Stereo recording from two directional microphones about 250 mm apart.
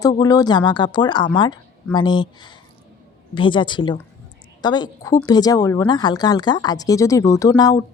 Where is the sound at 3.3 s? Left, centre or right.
Centre.